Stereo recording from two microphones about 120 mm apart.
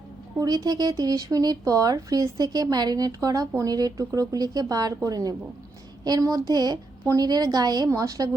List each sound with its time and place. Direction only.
0.3 s speech: 35° right (ahead or behind)